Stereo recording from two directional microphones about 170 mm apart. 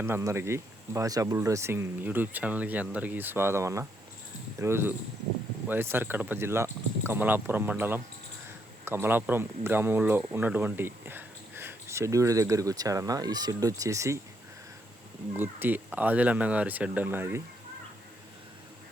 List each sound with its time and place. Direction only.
0.0 s speech: 15° right (ahead or behind)
15.3 s speech: 10° right (ahead or behind)